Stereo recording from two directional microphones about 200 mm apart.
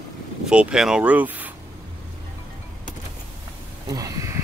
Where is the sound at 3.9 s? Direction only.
15° right (ahead or behind).